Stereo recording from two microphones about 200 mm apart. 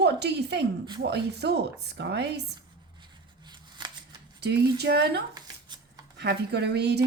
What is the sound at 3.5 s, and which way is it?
Scissors, 20° right (ahead or behind).